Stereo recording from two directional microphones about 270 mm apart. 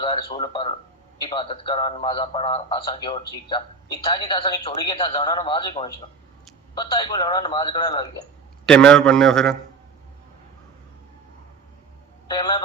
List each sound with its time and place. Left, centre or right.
0.0 s speech: centre
8.6 s a man's voice: centre
12.3 s speech: centre